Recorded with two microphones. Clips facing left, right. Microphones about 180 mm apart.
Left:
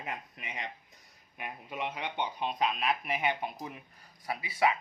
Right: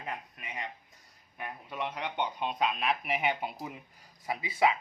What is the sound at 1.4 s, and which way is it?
Speech, 10° left (ahead or behind).